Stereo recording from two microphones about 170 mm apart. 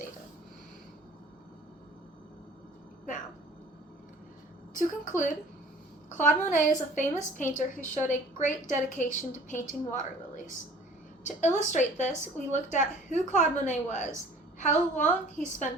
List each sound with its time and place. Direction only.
4.7 s a woman's voice: 50° left (ahead or behind)